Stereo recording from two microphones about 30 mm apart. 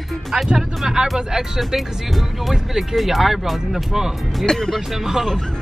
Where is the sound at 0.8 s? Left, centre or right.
Centre.